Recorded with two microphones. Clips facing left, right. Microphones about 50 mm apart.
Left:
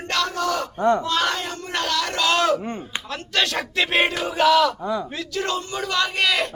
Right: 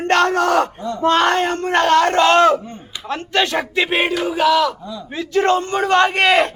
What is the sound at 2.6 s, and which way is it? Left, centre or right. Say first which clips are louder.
Speech: left 4 dB; left.